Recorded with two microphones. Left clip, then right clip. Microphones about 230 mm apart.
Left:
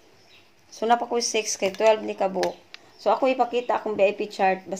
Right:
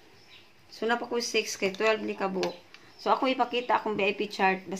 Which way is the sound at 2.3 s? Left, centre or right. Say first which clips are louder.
Left 6 dB; left.